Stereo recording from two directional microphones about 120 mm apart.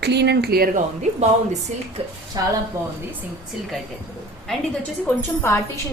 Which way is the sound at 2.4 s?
30° right (ahead or behind).